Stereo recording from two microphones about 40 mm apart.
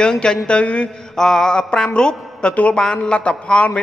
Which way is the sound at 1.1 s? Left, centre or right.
Centre.